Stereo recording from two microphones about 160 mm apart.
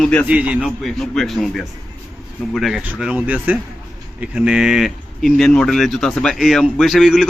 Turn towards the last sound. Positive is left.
turn(degrees=0)  # may be behind; listen again after turning